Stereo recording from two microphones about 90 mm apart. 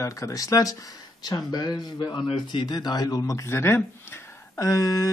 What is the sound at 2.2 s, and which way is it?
A man's voice, 65° left (ahead or behind).